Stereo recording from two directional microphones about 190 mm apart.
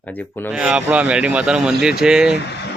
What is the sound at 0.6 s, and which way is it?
Speech, 5° right (ahead or behind).